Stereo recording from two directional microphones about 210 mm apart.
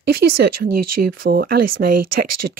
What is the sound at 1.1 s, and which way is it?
Speech, 45° right (ahead or behind).